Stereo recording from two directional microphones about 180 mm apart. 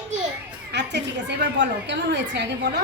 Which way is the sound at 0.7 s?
70° right (ahead or behind).